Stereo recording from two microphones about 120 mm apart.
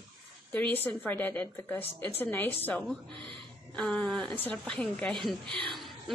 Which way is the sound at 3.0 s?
45° right (ahead or behind).